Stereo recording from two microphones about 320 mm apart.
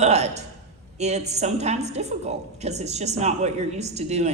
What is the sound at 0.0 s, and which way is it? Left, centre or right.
A woman's voice, right.